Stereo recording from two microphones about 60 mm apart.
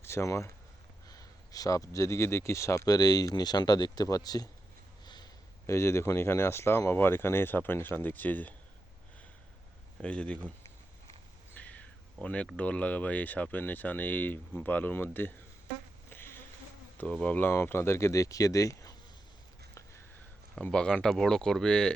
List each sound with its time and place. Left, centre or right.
0.0 s speech: left
1.0 s a sound: left
2.1 s speech: left
5.6 s speech: left
10.0 s speech: centre
11.5 s a sound: left
12.5 s speech: left
16.0 s insect: left
17.2 s speech: left
17.5 s speech: left
19.7 s a sound: left
20.6 s speech: centre